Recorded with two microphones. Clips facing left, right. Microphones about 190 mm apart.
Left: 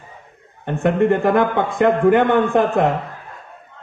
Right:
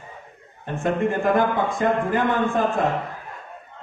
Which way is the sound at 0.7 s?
70° left (ahead or behind).